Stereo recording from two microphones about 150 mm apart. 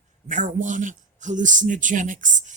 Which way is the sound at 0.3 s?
60° right (ahead or behind).